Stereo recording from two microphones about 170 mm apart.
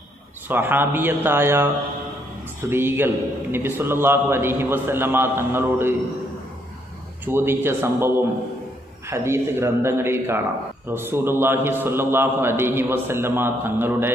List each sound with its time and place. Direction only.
0.5 s a man's voice: 10° right (ahead or behind)
2.7 s a man's voice: 15° right (ahead or behind)
7.2 s a man's voice: 15° right (ahead or behind)
9.1 s a man's voice: 15° right (ahead or behind)